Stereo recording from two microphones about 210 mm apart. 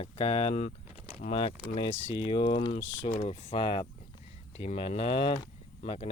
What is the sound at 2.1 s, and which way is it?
Speech, 25° left (ahead or behind).